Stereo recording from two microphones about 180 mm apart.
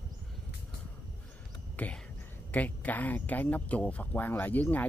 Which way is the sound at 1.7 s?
10° left (ahead or behind).